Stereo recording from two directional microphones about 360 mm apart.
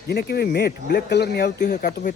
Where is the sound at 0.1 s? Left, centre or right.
Left.